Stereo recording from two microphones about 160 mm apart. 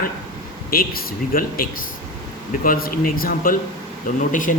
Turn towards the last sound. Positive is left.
turn(degrees=55)  # may be behind; listen again after turning